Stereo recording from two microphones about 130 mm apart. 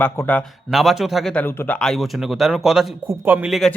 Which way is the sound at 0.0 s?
10° left (ahead or behind).